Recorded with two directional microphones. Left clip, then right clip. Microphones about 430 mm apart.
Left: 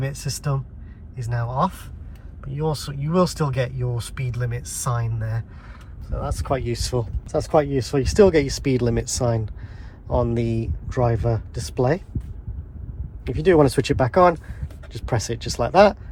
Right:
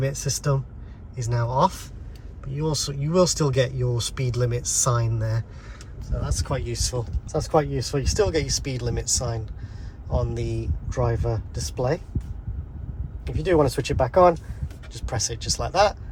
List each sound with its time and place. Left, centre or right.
0.0 s speech: centre
6.2 s speech: centre
13.2 s speech: centre